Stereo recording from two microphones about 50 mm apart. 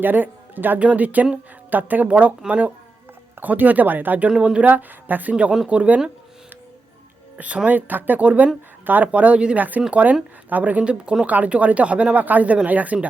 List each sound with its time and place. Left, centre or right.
0.0 s speech: right
0.8 s speech: right
4.3 s speech: right
5.3 s speech: right
7.3 s speech: right
9.6 s speech: right